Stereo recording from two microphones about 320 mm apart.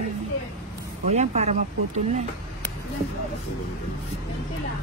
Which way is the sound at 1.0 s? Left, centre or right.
Right.